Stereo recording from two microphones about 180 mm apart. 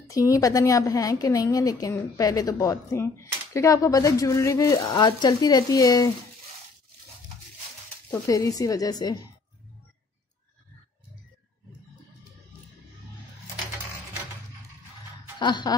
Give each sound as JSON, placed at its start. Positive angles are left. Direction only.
{"t": 0.1, "sound": "a woman's voice", "side_deg": 20}
{"t": 8.1, "sound": "a woman's voice", "side_deg": 15}
{"t": 15.3, "sound": "music", "side_deg": 25}